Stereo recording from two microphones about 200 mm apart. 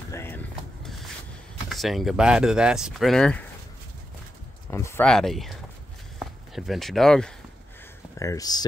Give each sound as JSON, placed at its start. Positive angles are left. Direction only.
{"t": 0.1, "sound": "a sound", "side_deg": 10}
{"t": 0.8, "sound": "rub", "side_deg": 0}
{"t": 1.7, "sound": "speech", "side_deg": 0}
{"t": 4.6, "sound": "speech", "side_deg": 10}
{"t": 8.2, "sound": "speech", "side_deg": 15}